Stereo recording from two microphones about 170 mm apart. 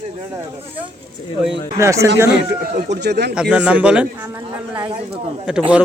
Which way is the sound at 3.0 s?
75° right (ahead or behind).